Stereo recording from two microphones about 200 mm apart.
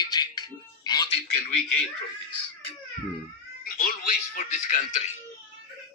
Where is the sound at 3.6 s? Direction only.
45° left (ahead or behind).